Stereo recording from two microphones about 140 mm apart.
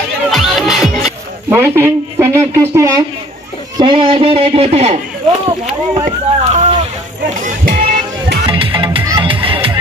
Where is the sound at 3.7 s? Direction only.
35° right (ahead or behind).